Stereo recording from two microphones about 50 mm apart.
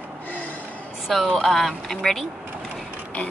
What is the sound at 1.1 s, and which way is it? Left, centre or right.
A woman's voice, centre.